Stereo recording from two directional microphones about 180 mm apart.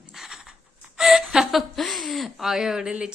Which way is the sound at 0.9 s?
Centre (ahead or behind).